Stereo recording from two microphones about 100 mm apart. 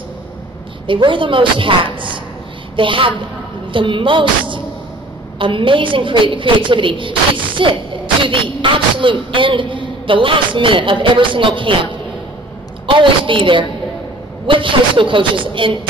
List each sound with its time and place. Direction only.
0.8 s a woman's voice: 55° right (ahead or behind)
12.9 s a woman's voice: 60° right (ahead or behind)